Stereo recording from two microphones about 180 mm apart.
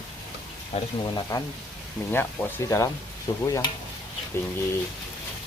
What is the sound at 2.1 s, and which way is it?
Speech, 10° left (ahead or behind).